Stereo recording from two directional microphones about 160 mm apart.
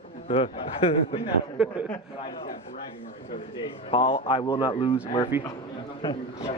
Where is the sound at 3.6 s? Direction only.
35° left (ahead or behind).